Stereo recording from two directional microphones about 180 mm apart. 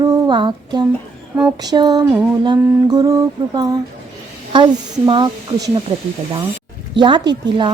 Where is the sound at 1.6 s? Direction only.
20° right (ahead or behind).